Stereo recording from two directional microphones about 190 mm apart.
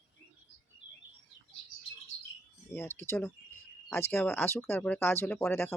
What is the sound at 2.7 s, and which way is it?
Speech, 10° left (ahead or behind).